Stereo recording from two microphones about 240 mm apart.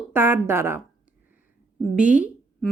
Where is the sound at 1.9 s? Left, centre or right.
Centre.